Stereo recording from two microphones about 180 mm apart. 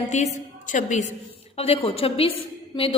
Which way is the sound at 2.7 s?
30° left (ahead or behind).